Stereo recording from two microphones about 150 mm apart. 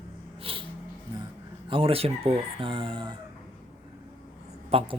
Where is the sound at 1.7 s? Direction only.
40° right (ahead or behind).